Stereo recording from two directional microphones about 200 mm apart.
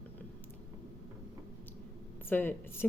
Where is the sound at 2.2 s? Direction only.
10° left (ahead or behind).